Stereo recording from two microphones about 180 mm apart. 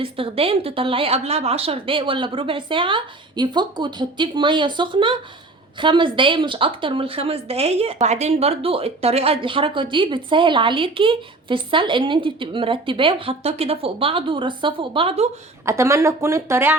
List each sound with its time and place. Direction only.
0.0 s a woman's voice: 30° right (ahead or behind)
15.6 s speech: 15° right (ahead or behind)